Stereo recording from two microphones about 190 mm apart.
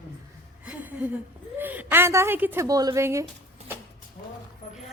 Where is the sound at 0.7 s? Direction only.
5° right (ahead or behind).